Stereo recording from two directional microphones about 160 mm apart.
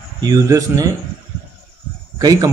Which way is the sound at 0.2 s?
20° right (ahead or behind).